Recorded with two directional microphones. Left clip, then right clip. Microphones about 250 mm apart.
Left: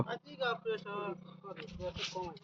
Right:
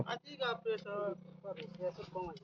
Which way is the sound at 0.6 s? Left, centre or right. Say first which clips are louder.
Even; centre.